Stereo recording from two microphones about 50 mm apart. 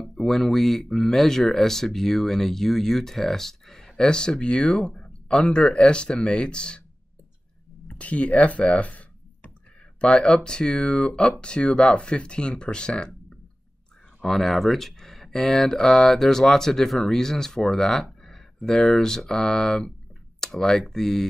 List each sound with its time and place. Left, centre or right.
0.0 s speech: centre
7.9 s speech: left
14.2 s speech: centre